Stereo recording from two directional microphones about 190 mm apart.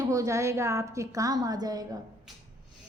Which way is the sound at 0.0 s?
20° right (ahead or behind).